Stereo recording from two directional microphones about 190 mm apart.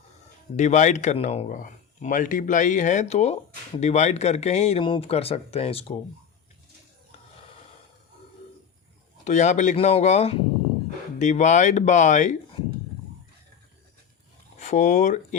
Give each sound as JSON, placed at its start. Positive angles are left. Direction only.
{"t": 0.5, "sound": "speech", "side_deg": 35}
{"t": 9.2, "sound": "speech", "side_deg": 40}
{"t": 14.6, "sound": "speech", "side_deg": 40}